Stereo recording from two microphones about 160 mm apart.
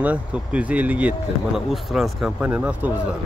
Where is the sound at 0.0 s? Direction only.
10° right (ahead or behind).